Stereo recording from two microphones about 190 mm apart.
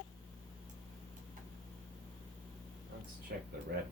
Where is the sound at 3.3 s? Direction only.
55° right (ahead or behind).